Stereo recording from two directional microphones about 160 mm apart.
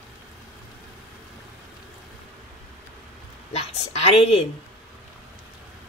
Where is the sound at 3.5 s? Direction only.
40° left (ahead or behind).